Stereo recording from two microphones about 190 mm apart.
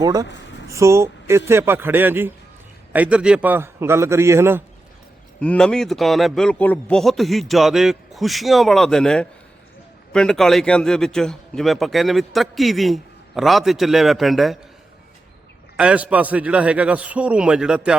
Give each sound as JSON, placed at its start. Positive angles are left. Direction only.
{"t": 0.0, "sound": "a man's voice", "side_deg": -20}
{"t": 5.4, "sound": "a man's voice", "side_deg": 5}
{"t": 15.8, "sound": "a man's voice", "side_deg": -5}